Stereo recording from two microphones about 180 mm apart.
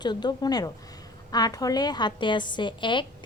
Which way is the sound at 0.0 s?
25° left (ahead or behind).